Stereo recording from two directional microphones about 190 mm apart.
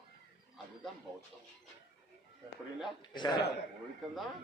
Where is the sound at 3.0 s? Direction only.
25° left (ahead or behind).